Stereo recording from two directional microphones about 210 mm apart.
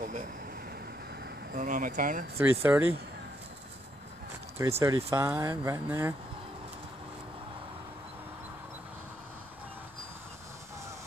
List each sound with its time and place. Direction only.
1.5 s speech: 40° right (ahead or behind)
2.3 s speech: 10° right (ahead or behind)
4.6 s speech: 15° right (ahead or behind)